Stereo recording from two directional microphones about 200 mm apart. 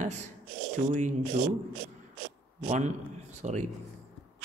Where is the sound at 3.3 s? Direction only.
35° right (ahead or behind).